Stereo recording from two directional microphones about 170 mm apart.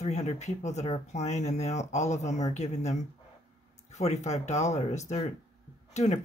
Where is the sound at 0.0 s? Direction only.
40° left (ahead or behind).